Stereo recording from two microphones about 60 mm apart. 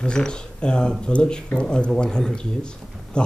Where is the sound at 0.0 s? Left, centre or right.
Centre.